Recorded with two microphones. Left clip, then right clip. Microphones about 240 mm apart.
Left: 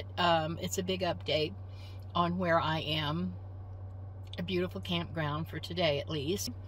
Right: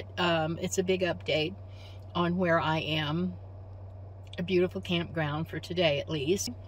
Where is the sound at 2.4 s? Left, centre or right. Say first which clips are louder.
Right 4 dB; centre.